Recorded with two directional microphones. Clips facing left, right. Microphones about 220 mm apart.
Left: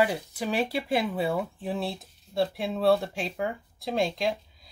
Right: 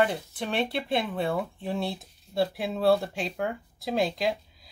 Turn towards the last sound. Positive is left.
turn(degrees=0)  # may be behind; listen again after turning